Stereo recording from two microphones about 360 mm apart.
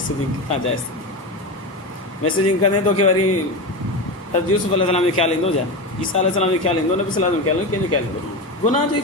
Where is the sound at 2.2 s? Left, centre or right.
Left.